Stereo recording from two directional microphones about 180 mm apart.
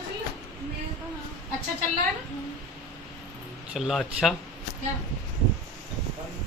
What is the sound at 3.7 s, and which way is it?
Speech, centre (ahead or behind).